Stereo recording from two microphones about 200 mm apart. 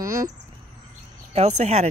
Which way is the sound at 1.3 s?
35° right (ahead or behind).